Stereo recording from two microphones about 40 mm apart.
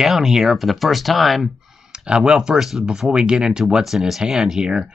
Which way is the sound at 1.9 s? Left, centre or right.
Right.